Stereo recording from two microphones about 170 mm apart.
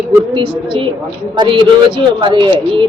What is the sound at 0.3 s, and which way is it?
Speech, 30° right (ahead or behind).